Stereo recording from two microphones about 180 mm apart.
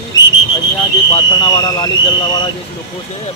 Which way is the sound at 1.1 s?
25° left (ahead or behind).